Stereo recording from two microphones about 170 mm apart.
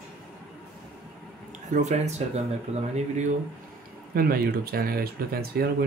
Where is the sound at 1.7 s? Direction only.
45° right (ahead or behind).